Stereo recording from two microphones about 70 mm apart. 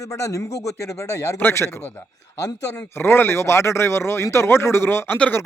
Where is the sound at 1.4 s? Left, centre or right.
Left.